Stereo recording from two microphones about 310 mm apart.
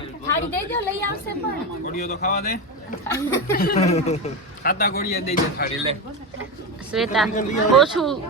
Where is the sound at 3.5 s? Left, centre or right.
Left.